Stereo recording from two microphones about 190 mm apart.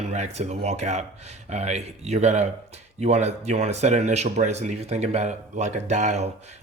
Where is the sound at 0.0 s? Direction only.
35° right (ahead or behind).